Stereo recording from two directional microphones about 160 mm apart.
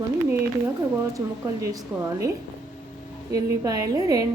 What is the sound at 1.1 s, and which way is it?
A woman's voice, 20° right (ahead or behind).